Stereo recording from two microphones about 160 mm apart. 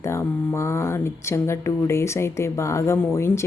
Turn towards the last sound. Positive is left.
turn(degrees=15)  # may be behind; listen again after turning